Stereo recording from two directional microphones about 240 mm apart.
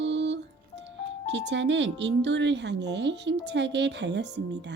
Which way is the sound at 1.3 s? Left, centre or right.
Right.